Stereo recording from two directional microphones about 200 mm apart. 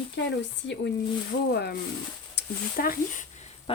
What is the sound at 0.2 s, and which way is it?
Speech, 60° left (ahead or behind).